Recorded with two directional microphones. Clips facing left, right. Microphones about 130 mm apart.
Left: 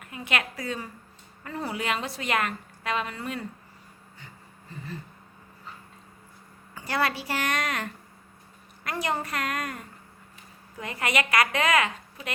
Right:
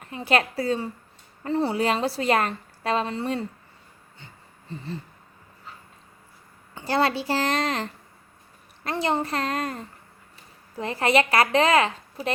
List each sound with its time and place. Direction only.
0.0 s a woman's voice: 30° right (ahead or behind)
4.7 s speech: 30° right (ahead or behind)
6.7 s a woman's voice: 30° right (ahead or behind)